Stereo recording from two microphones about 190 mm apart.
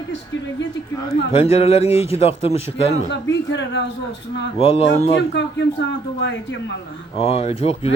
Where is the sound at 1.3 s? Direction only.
30° left (ahead or behind).